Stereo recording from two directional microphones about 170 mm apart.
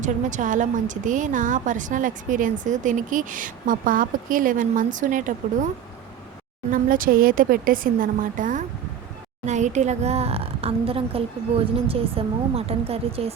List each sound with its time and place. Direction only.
0.0 s a woman's voice: 45° right (ahead or behind)
6.7 s a woman's voice: 55° right (ahead or behind); by 13.3 s 35° right (ahead or behind)